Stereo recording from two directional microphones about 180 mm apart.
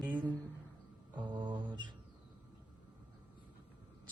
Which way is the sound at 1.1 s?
25° right (ahead or behind).